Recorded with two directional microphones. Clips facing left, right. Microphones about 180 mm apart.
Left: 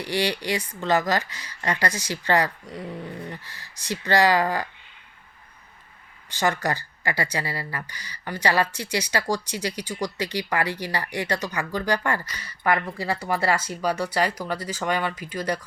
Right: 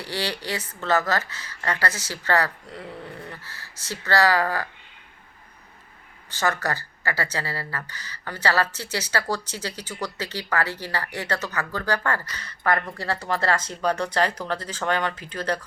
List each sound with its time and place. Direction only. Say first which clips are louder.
0.0 s speech: left 4 dB; 15° left (ahead or behind)
6.3 s speech: left 1 dB; 15° left (ahead or behind)